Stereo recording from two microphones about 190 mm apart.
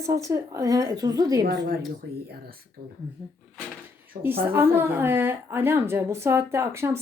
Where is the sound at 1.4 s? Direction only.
60° right (ahead or behind).